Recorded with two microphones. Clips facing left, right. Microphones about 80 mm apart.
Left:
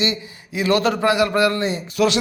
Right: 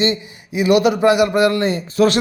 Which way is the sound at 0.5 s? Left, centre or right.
Centre.